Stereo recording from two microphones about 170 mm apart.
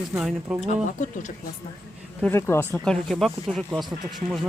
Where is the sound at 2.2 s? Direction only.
10° left (ahead or behind).